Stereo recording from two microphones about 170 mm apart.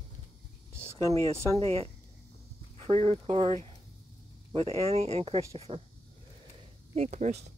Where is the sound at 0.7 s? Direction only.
15° right (ahead or behind).